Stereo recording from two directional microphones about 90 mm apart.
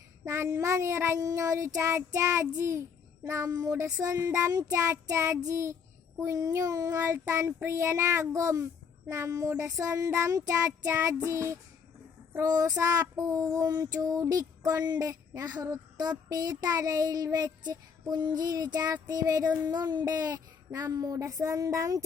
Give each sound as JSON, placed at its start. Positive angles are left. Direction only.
{"t": 0.3, "sound": "child singing", "side_deg": -30}